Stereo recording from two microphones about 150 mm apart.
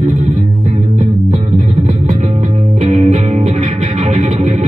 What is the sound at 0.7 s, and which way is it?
Music, 60° right (ahead or behind).